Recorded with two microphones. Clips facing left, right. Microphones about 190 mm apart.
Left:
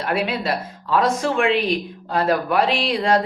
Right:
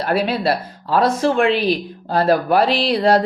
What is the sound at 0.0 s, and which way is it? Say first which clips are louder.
Speech: right 4 dB; 35° right (ahead or behind).